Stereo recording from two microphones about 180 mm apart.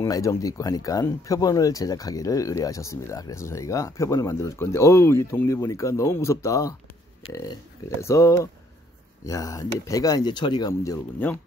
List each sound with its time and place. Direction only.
0.0 s speech: 15° left (ahead or behind)
8.0 s speech: 15° left (ahead or behind)